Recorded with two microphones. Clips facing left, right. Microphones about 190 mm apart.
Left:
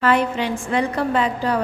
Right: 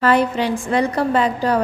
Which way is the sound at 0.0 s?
35° right (ahead or behind).